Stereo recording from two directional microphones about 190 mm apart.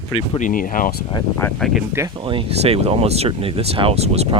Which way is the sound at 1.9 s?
20° right (ahead or behind).